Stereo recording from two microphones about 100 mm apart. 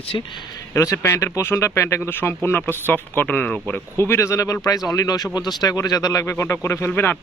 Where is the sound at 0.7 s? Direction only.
25° left (ahead or behind); by 3.8 s 10° left (ahead or behind).